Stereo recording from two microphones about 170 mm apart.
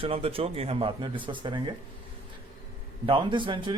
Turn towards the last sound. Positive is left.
turn(degrees=-30)  # may be behind; listen again after turning